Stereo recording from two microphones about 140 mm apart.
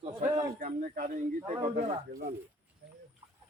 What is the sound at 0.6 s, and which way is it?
Speech, 65° right (ahead or behind).